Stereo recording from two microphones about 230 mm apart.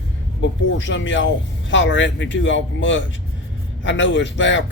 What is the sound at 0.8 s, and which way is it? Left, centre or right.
Speech, left.